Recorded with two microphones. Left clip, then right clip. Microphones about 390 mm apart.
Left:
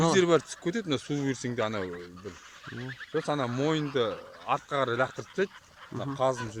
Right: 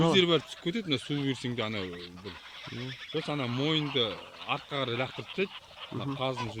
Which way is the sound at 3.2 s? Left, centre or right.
Left.